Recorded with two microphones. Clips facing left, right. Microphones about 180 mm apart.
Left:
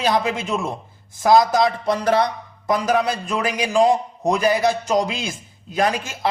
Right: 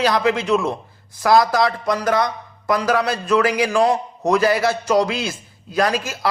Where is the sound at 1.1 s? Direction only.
20° left (ahead or behind).